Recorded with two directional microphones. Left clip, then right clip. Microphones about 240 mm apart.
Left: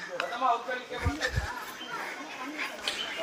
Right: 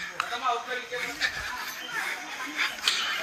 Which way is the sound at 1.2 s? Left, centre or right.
Centre.